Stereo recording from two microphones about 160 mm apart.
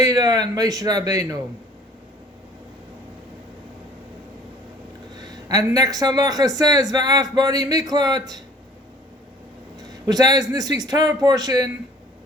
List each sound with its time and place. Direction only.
0.0 s a man's voice: 25° right (ahead or behind)
5.5 s speech: 20° right (ahead or behind)
10.1 s speech: 25° right (ahead or behind)